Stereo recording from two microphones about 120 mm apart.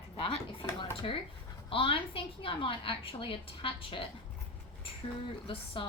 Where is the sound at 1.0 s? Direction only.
55° left (ahead or behind).